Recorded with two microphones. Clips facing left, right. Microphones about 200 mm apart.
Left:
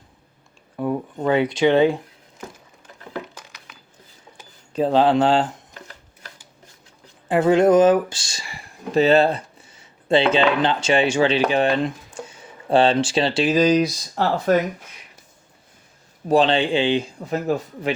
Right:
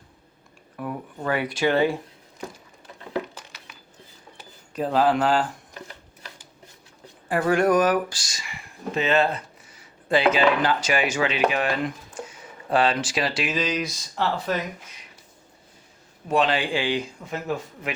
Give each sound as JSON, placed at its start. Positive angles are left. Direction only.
{"t": 0.8, "sound": "speech", "side_deg": 25}
{"t": 3.1, "sound": "a sound", "side_deg": -5}
{"t": 4.7, "sound": "speech", "side_deg": 25}
{"t": 7.3, "sound": "speech", "side_deg": 20}
{"t": 16.3, "sound": "a man's voice", "side_deg": 30}